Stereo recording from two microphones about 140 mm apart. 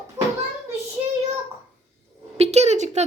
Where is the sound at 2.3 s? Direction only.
50° right (ahead or behind).